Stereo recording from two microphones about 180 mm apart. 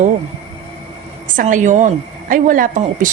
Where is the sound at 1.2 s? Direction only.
50° right (ahead or behind).